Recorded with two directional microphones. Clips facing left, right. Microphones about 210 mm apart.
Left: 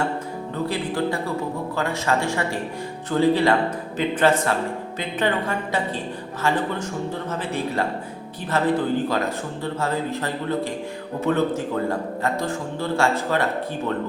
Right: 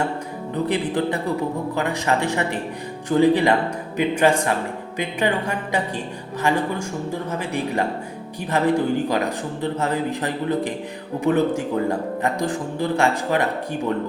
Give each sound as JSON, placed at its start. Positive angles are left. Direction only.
{"t": 0.5, "sound": "speech", "side_deg": -20}
{"t": 7.3, "sound": "speech", "side_deg": -15}